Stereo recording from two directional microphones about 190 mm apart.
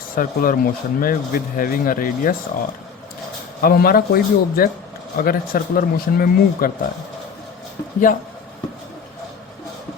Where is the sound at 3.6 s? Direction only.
50° left (ahead or behind).